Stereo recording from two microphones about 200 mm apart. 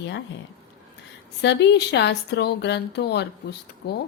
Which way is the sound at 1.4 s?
60° left (ahead or behind).